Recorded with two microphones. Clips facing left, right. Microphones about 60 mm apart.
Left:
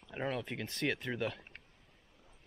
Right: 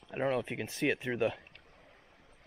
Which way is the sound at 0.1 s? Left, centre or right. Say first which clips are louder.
Right 6 dB; centre.